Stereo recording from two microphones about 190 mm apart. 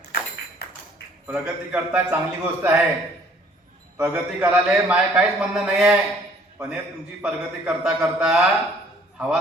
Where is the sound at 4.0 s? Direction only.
5° right (ahead or behind).